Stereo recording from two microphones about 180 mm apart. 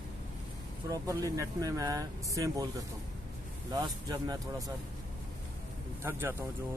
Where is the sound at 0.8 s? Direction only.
20° right (ahead or behind).